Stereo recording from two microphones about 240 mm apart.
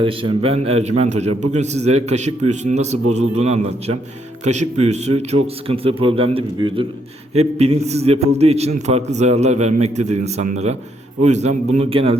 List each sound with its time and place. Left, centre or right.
0.0 s a man's voice: right